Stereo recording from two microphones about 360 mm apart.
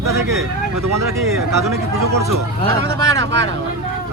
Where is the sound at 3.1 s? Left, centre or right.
Right.